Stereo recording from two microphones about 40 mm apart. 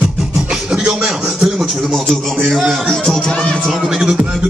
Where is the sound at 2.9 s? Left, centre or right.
Centre.